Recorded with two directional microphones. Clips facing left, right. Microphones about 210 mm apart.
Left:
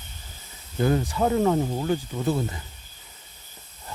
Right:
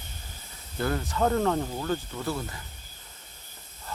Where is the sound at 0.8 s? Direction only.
20° left (ahead or behind).